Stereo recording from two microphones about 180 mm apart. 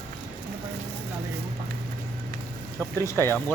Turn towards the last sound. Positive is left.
turn(degrees=10)  # may be behind; listen again after turning